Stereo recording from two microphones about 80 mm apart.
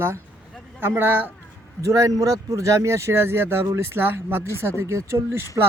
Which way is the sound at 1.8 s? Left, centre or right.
Right.